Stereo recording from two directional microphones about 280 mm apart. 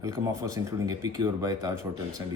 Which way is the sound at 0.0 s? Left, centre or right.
Centre.